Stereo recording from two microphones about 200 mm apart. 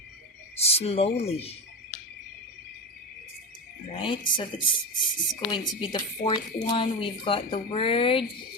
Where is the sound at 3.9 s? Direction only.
25° left (ahead or behind).